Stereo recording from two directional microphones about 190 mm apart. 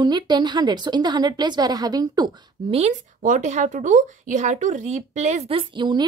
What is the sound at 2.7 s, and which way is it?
Speech, 40° right (ahead or behind).